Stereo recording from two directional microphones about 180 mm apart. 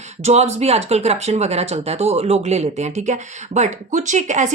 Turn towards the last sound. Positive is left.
turn(degrees=-40)  # may be behind; listen again after turning